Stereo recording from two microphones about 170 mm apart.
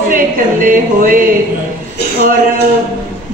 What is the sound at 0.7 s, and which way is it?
Speech, 55° right (ahead or behind).